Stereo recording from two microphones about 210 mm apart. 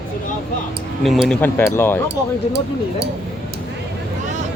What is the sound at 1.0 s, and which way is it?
Speech, centre (ahead or behind).